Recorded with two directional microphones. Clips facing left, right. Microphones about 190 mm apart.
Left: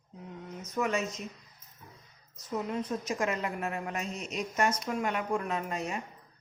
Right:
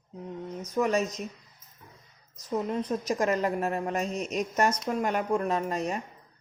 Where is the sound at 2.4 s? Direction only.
35° right (ahead or behind).